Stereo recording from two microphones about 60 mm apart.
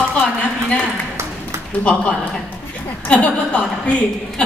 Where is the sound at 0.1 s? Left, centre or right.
Left.